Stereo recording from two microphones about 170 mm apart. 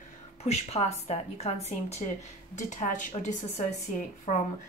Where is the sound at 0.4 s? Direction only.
40° left (ahead or behind).